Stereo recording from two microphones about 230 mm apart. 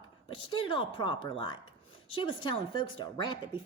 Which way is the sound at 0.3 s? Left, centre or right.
Left.